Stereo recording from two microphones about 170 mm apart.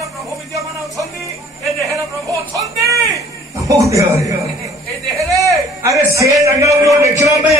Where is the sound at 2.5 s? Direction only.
20° right (ahead or behind).